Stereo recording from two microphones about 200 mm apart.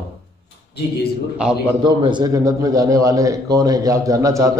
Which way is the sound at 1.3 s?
5° right (ahead or behind).